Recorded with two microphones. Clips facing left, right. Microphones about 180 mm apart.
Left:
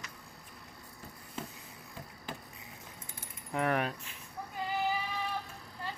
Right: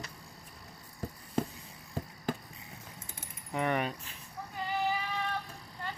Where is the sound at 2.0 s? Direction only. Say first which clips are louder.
Right 9 dB; 40° right (ahead or behind).